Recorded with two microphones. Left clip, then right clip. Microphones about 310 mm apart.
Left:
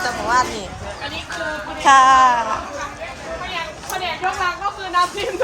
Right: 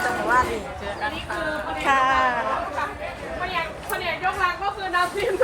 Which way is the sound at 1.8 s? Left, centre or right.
Centre.